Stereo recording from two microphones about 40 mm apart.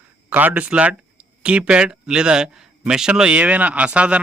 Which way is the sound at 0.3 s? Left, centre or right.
Right.